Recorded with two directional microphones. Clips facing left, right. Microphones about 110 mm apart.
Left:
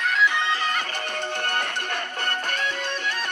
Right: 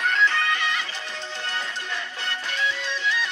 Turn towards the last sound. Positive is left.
turn(degrees=50)  # may be behind; listen again after turning